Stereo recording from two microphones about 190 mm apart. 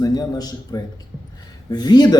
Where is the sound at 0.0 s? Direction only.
20° left (ahead or behind).